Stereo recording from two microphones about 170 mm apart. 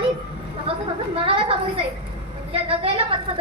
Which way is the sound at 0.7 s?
35° right (ahead or behind).